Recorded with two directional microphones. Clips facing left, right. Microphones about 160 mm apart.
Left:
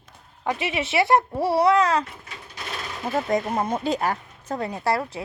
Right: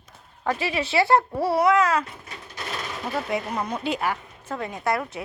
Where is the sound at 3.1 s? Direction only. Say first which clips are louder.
Left 4 dB; 45° left (ahead or behind).